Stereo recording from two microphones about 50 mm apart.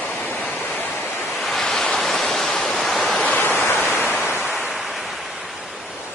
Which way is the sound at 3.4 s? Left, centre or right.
Left.